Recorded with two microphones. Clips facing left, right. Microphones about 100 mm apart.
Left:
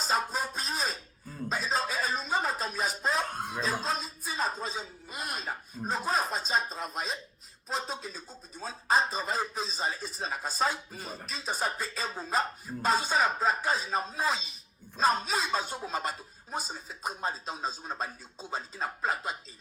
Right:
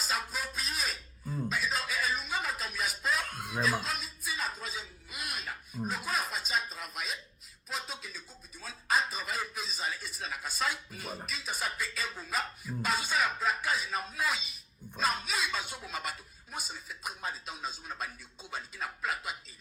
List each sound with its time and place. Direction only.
0.0 s speech: 40° left (ahead or behind)